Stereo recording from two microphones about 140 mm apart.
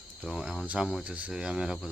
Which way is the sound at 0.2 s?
5° right (ahead or behind).